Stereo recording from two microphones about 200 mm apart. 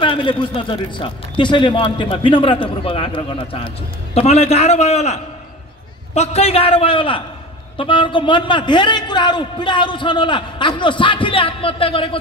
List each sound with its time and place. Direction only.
0.0 s a man's voice: 25° left (ahead or behind)